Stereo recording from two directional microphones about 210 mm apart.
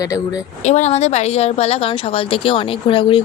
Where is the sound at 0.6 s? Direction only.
35° left (ahead or behind).